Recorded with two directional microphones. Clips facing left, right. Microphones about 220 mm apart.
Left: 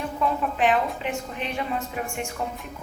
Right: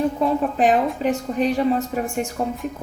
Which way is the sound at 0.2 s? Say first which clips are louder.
Right 5 dB; 40° right (ahead or behind).